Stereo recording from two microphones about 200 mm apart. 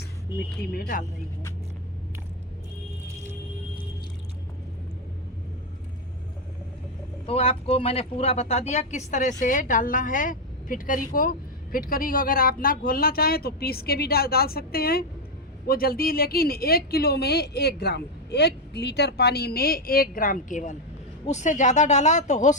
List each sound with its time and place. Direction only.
0.7 s speech: 50° left (ahead or behind)
7.3 s speech: 30° left (ahead or behind)